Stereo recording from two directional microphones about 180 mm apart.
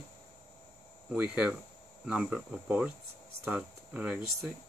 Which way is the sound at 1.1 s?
5° right (ahead or behind).